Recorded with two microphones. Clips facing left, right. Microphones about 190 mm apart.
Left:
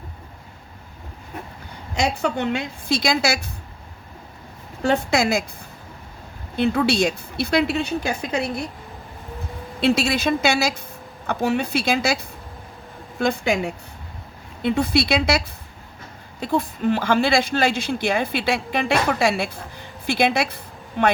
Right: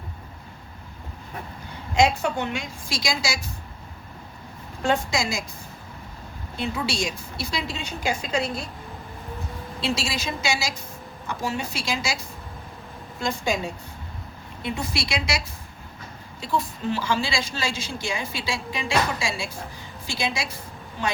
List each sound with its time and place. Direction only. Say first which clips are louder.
2.2 s a woman's voice: left 4 dB; 65° left (ahead or behind)
4.9 s a woman's voice: left 7 dB; 60° left (ahead or behind)
6.6 s a woman's voice: left 9 dB; 60° left (ahead or behind)
9.8 s a woman's voice: left 9 dB; 60° left (ahead or behind)
16.4 s a woman's voice: left 5 dB; 55° left (ahead or behind)